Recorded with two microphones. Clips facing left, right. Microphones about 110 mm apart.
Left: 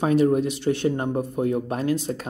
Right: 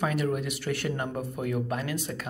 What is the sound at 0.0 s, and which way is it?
Speech, 30° left (ahead or behind).